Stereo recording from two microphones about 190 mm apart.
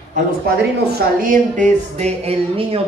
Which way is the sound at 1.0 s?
45° right (ahead or behind).